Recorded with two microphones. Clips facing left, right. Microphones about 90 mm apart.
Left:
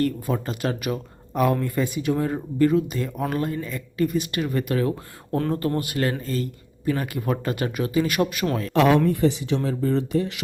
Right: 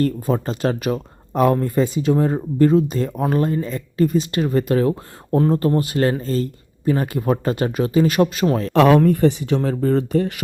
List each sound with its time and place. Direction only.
0.0 s speech: 35° right (ahead or behind)
8.7 s speech: 55° right (ahead or behind)